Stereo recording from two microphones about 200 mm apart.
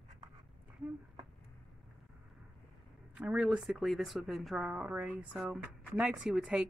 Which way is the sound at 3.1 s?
5° right (ahead or behind).